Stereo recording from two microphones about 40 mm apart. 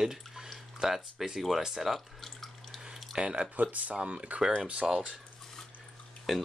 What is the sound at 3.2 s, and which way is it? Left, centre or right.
Speech, right.